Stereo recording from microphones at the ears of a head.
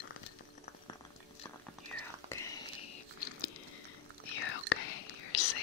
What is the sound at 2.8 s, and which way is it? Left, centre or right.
Biting, left.